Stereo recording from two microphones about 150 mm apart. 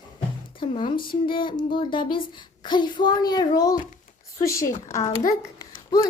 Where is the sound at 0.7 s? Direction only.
35° left (ahead or behind).